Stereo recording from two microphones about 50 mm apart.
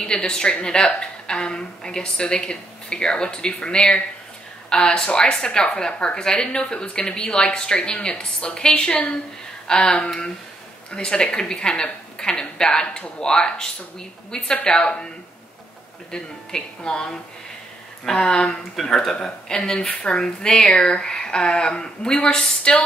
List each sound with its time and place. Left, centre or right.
0.0 s speech: centre
16.1 s speech: centre
18.8 s speech: centre